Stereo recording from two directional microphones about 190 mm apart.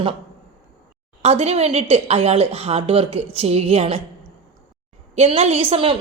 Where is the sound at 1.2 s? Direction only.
35° right (ahead or behind).